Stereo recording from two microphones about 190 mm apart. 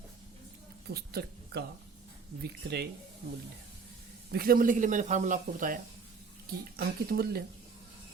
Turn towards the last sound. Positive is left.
turn(degrees=-55)  # may be behind; listen again after turning